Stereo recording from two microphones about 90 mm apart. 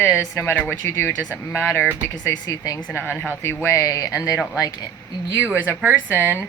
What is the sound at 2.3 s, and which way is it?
Speech, 45° left (ahead or behind).